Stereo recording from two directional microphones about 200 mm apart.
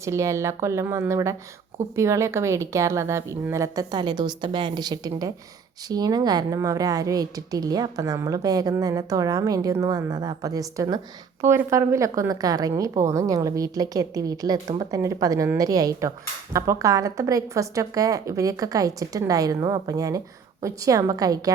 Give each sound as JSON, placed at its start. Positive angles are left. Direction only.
{"t": 0.0, "sound": "a woman's voice", "side_deg": -15}